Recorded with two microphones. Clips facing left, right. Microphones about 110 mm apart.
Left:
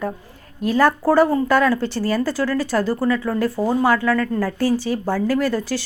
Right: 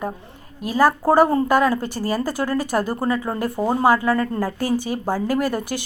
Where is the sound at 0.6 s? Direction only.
10° right (ahead or behind).